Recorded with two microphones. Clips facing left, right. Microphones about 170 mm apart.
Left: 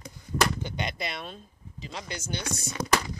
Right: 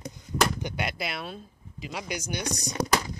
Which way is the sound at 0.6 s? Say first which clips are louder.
Right 1 dB; 5° right (ahead or behind).